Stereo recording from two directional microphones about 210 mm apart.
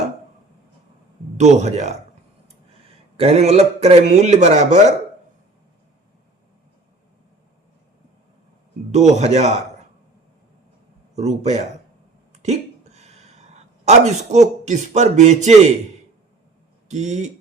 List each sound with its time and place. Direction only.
1.4 s a man's voice: 35° right (ahead or behind)
8.9 s a man's voice: 35° right (ahead or behind)
11.1 s a man's voice: 30° right (ahead or behind)
12.3 s a sound: 35° right (ahead or behind)
16.9 s a man's voice: 35° right (ahead or behind)